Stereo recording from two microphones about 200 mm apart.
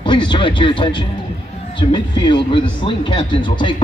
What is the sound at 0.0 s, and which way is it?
Speech, 25° left (ahead or behind).